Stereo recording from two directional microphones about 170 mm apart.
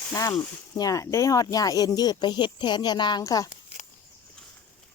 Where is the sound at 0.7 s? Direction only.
20° left (ahead or behind).